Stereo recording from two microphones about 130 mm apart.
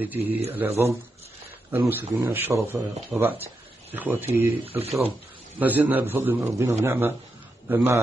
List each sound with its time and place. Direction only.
0.0 s speech: 15° right (ahead or behind)